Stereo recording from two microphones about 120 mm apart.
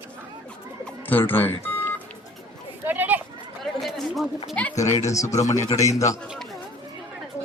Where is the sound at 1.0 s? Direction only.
15° left (ahead or behind).